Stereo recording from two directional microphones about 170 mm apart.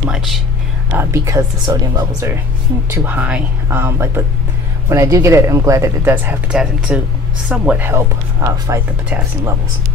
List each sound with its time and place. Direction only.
0.9 s speech: 15° right (ahead or behind)